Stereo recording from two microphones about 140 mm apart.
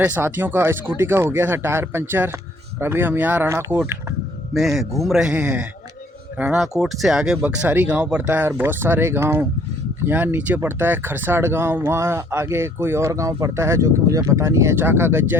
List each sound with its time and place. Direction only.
0.0 s speech: 15° right (ahead or behind)
4.5 s a man's voice: centre (ahead or behind); by 15.4 s 15° right (ahead or behind)